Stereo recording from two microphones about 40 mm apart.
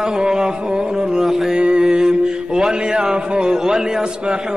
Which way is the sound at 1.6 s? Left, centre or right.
Right.